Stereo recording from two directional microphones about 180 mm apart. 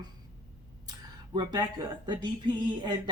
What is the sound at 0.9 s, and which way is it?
Speech, 25° right (ahead or behind).